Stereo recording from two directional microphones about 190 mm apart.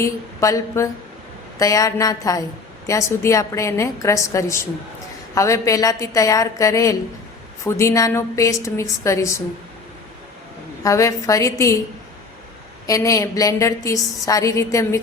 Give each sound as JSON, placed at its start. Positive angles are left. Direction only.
{"t": 0.0, "sound": "a woman's voice", "side_deg": 15}
{"t": 10.8, "sound": "a woman's voice", "side_deg": 15}
{"t": 12.9, "sound": "a woman's voice", "side_deg": 15}